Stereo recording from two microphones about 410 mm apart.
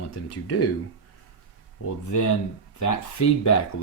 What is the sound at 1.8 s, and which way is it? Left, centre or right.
Speech, left.